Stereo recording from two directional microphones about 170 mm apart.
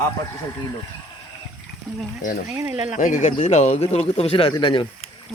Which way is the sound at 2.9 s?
50° left (ahead or behind).